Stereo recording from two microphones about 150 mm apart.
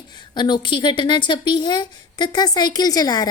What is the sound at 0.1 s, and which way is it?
A woman's voice, 30° left (ahead or behind).